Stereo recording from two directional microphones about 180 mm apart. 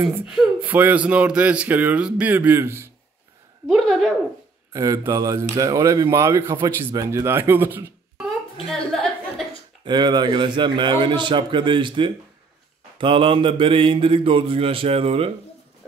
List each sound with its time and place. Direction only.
0.1 s speech: 10° right (ahead or behind)
3.6 s a woman's voice: centre (ahead or behind)
4.7 s speech: 20° right (ahead or behind)
8.6 s a sound: centre (ahead or behind)
9.8 s mantra: 25° right (ahead or behind)